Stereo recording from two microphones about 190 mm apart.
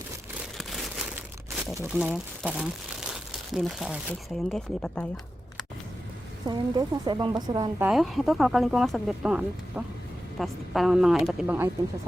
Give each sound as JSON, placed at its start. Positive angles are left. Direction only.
{"t": 0.5, "sound": "crumpling", "side_deg": 0}
{"t": 1.7, "sound": "speech", "side_deg": -15}
{"t": 6.5, "sound": "speech", "side_deg": -20}
{"t": 7.8, "sound": "speech", "side_deg": -5}